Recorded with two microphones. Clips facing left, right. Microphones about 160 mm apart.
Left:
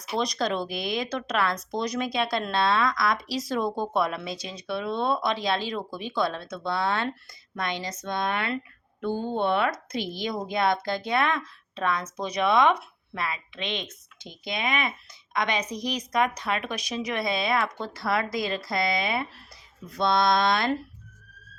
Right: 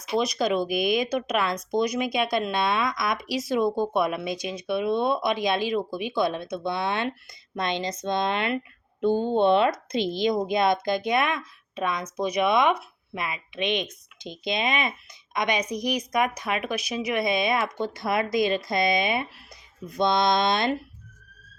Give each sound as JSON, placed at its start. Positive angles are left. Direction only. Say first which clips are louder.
{"t": 0.2, "sound": "speech", "louder": "right 3 dB", "side_deg": -10}